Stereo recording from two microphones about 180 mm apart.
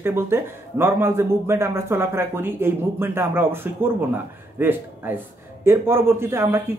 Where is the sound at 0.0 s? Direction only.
15° right (ahead or behind).